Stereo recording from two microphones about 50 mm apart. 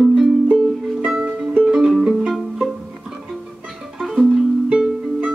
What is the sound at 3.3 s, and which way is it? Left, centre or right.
Music, centre.